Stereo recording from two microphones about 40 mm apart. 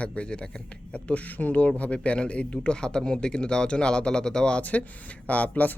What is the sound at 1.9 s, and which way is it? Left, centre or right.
A man's voice, left.